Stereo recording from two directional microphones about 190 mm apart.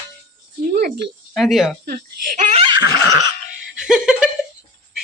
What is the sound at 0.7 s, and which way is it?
Speech, 55° right (ahead or behind).